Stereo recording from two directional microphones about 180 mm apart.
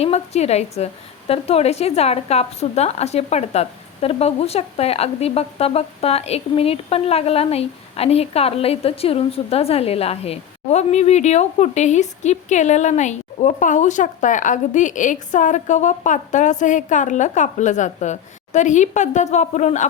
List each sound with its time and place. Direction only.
0.0 s speech: 35° left (ahead or behind)